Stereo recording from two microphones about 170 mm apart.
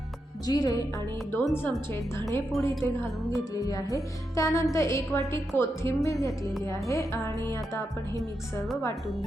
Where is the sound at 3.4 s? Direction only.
20° left (ahead or behind).